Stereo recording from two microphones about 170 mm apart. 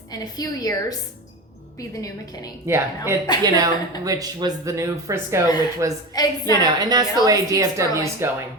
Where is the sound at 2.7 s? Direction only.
15° right (ahead or behind).